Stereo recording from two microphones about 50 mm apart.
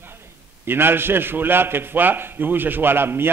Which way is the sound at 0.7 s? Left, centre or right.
Right.